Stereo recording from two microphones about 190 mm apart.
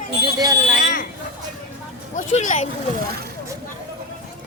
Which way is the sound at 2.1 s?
40° left (ahead or behind).